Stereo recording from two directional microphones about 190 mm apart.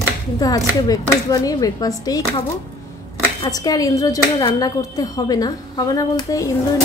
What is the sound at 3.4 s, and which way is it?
Speech, 20° left (ahead or behind).